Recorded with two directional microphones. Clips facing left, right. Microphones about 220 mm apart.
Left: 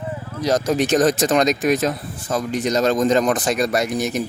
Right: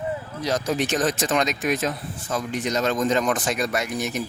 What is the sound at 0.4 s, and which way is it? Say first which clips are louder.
Speech: left 5 dB; 40° left (ahead or behind).